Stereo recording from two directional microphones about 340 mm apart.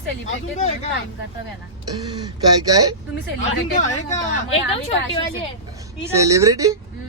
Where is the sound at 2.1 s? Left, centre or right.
Centre.